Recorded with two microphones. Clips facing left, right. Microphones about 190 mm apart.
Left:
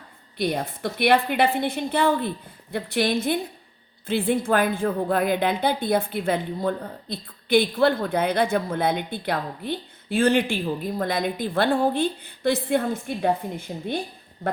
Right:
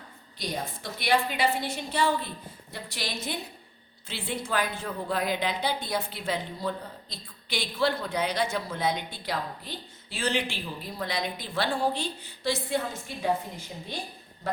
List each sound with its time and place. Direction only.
0.3 s a woman's voice: 60° left (ahead or behind)